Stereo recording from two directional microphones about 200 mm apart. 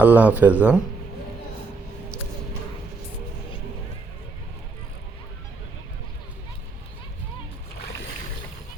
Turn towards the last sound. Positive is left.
turn(degrees=55)  # may be behind; listen again after turning